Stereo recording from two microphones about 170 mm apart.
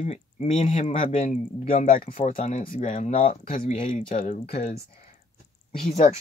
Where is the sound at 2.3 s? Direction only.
50° left (ahead or behind).